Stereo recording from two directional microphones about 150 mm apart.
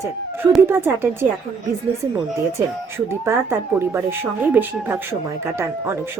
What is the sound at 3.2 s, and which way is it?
Speech, 15° right (ahead or behind).